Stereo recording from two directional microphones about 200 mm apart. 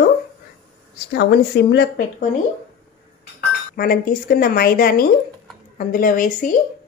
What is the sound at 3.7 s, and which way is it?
Speech, 45° left (ahead or behind).